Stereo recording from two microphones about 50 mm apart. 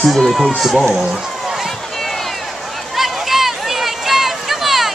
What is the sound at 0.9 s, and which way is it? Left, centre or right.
Speech, centre.